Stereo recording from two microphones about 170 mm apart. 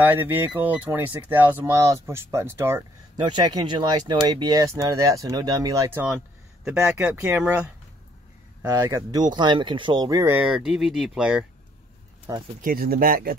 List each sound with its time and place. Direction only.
0.0 s speech: 10° right (ahead or behind)
3.2 s speech: 25° right (ahead or behind); by 7.0 s 5° right (ahead or behind)
7.0 s speech: 15° right (ahead or behind)
8.6 s speech: 20° right (ahead or behind)
12.3 s speech: 20° right (ahead or behind)
12.6 s speech: 60° right (ahead or behind)